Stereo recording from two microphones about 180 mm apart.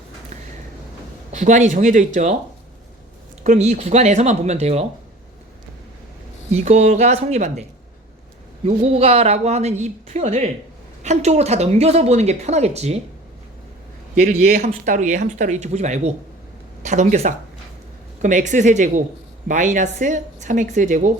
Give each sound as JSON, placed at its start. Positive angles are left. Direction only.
{"t": 1.3, "sound": "a woman's voice", "side_deg": -40}
{"t": 3.4, "sound": "speech", "side_deg": -45}
{"t": 6.7, "sound": "speech", "side_deg": -40}
{"t": 8.6, "sound": "speech", "side_deg": -35}
{"t": 14.2, "sound": "a woman's voice", "side_deg": -55}